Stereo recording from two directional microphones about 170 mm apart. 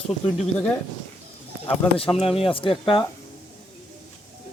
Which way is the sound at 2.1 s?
35° left (ahead or behind).